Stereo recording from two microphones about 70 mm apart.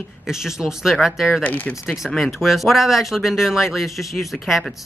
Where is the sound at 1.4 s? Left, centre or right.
Left.